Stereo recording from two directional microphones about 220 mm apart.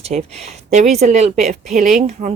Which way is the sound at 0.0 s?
30° right (ahead or behind).